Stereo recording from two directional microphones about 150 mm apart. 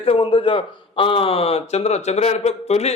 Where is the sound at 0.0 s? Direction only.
40° left (ahead or behind).